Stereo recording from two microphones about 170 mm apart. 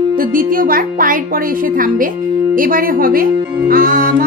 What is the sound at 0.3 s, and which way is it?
Speech, 55° right (ahead or behind).